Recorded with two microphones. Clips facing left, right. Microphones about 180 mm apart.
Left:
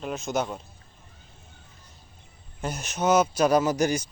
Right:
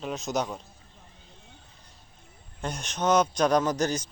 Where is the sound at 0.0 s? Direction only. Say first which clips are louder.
Left 1 dB; centre (ahead or behind).